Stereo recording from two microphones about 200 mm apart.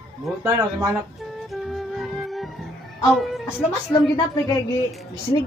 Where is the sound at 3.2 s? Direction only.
Centre (ahead or behind).